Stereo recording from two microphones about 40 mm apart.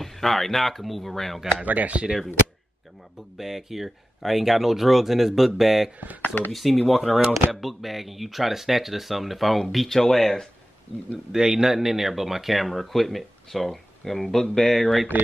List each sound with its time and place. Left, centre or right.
0.0 s speech: centre
1.6 s speech: right
3.3 s speech: centre
11.3 s speech: centre